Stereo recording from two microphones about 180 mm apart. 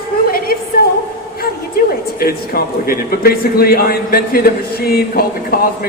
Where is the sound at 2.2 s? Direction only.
55° left (ahead or behind).